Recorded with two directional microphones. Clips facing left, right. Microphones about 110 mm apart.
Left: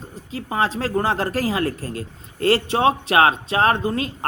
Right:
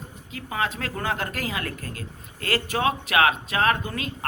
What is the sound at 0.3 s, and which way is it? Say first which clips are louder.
A man's voice: left 6 dB; 30° left (ahead or behind).